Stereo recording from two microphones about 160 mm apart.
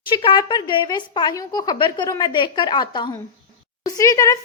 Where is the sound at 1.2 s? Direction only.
25° left (ahead or behind).